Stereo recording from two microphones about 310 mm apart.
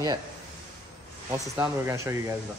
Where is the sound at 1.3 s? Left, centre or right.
Centre.